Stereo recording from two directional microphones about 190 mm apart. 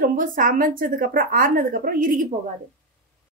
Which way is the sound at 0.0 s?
45° right (ahead or behind).